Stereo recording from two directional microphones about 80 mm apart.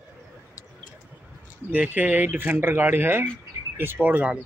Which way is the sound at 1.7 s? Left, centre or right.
Centre.